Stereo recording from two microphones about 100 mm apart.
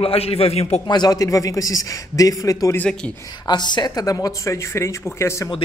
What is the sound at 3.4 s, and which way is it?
Speech, 45° left (ahead or behind).